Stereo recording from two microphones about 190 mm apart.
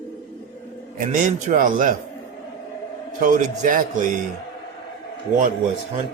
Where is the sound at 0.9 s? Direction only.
45° right (ahead or behind).